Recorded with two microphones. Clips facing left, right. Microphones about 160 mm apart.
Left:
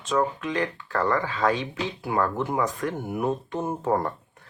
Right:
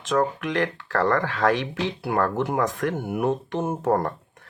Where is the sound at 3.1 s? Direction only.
75° right (ahead or behind).